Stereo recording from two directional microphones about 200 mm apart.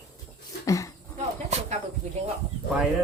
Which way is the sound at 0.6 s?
15° left (ahead or behind).